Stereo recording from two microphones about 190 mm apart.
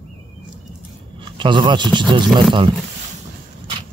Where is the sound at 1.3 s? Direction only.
25° right (ahead or behind).